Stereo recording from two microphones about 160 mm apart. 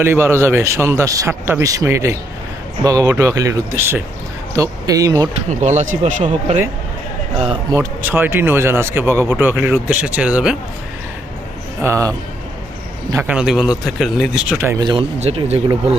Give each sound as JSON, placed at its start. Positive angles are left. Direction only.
{"t": 0.0, "sound": "speech", "side_deg": -15}
{"t": 5.5, "sound": "speech", "side_deg": -45}
{"t": 7.7, "sound": "speech", "side_deg": -15}
{"t": 11.8, "sound": "speech", "side_deg": -20}
{"t": 14.8, "sound": "speech", "side_deg": -25}
{"t": 15.2, "sound": "speech", "side_deg": -40}